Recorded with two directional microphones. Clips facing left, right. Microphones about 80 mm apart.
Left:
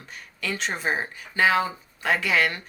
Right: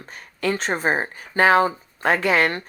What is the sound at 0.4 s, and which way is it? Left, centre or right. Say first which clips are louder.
Speech: right 6 dB; right.